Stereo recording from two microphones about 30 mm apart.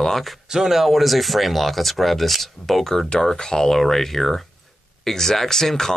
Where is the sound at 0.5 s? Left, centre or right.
Centre.